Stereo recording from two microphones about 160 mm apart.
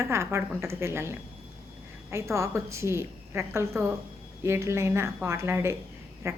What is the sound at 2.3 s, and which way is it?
A woman's voice, 15° right (ahead or behind).